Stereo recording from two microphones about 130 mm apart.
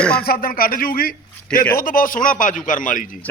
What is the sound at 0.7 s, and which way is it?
A man's voice, 90° left.